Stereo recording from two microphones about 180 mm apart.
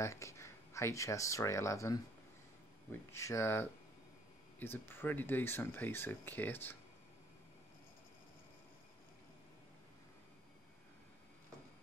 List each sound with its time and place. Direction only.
0.0 s speech: 15° left (ahead or behind)